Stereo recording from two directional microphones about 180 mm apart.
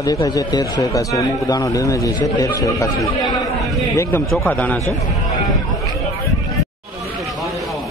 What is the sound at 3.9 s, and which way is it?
A man's voice, 15° left (ahead or behind).